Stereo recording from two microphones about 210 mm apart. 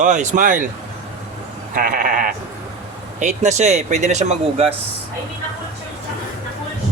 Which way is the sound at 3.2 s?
35° right (ahead or behind).